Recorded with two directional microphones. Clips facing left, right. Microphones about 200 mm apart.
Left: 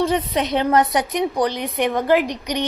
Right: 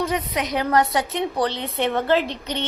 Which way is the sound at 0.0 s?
30° left (ahead or behind).